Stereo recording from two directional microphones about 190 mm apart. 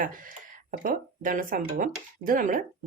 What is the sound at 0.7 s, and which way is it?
A woman's voice, 50° right (ahead or behind).